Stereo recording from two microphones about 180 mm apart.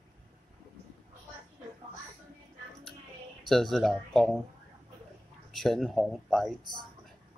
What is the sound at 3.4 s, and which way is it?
Speech, centre (ahead or behind).